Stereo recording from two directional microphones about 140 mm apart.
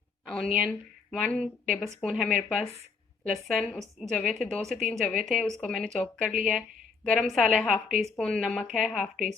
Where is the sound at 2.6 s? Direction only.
50° left (ahead or behind).